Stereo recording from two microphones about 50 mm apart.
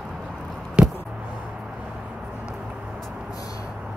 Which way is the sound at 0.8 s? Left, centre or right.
Centre.